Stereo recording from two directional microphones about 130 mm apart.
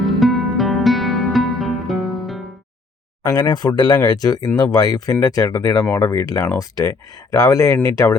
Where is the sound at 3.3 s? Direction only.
35° left (ahead or behind).